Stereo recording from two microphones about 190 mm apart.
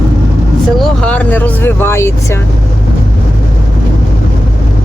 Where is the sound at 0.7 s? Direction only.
5° left (ahead or behind).